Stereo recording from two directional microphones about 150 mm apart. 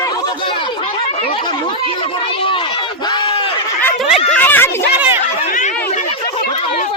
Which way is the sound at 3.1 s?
30° left (ahead or behind).